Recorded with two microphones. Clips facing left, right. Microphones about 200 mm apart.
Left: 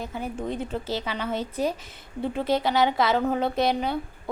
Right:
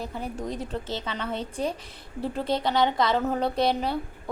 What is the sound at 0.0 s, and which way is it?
A woman's voice, centre (ahead or behind).